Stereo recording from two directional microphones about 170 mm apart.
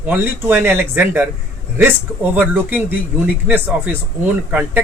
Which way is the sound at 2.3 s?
10° right (ahead or behind).